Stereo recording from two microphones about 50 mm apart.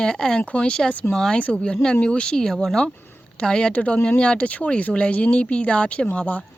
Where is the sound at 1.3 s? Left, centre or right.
Left.